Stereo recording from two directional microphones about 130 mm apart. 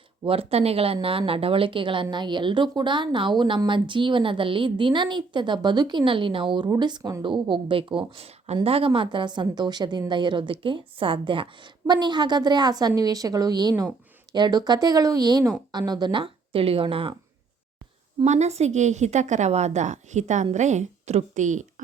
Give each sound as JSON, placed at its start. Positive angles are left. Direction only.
{"t": 0.3, "sound": "a woman's voice", "side_deg": -50}
{"t": 18.3, "sound": "a woman's voice", "side_deg": -60}